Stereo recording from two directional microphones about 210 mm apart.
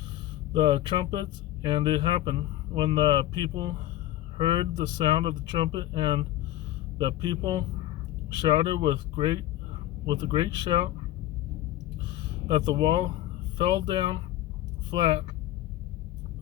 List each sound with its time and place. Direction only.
0.6 s speech: 25° right (ahead or behind)
12.5 s speech: 20° right (ahead or behind)